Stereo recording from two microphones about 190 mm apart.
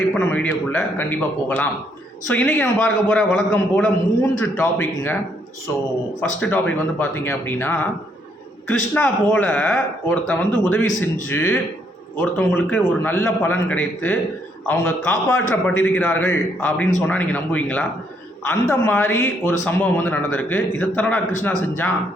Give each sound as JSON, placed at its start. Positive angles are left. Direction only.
{"t": 0.1, "sound": "a man's voice", "side_deg": 5}
{"t": 6.4, "sound": "a man's voice", "side_deg": 10}
{"t": 9.0, "sound": "a man's voice", "side_deg": 10}